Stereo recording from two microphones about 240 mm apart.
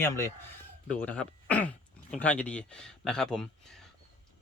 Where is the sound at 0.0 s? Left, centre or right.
Centre.